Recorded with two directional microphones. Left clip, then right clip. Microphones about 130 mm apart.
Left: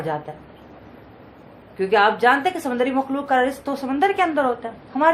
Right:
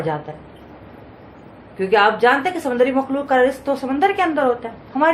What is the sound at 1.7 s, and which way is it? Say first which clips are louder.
A woman's voice: right 2 dB; 35° left (ahead or behind).